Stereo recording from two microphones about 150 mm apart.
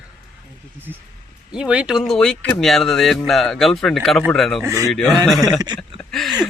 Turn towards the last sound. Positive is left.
turn(degrees=0)  # may be behind; listen again after turning